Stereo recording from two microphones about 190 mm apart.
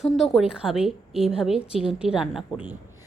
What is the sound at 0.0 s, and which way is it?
Speech, centre (ahead or behind).